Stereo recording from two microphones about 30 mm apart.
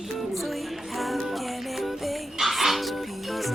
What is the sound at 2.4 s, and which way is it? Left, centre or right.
Music, centre.